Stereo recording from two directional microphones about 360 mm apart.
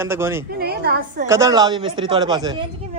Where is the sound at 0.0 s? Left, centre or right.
Centre.